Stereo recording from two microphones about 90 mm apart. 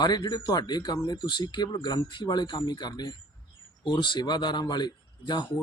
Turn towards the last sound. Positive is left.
turn(degrees=55)  # may be behind; listen again after turning